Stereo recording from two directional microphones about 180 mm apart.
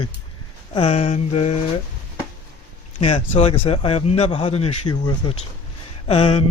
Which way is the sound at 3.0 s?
35° left (ahead or behind).